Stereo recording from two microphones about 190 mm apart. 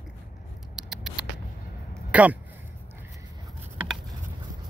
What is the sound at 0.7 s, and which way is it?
Patter, 5° right (ahead or behind).